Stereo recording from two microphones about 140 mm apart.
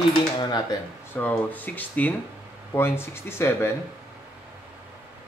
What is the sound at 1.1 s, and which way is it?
A man's voice, 10° left (ahead or behind).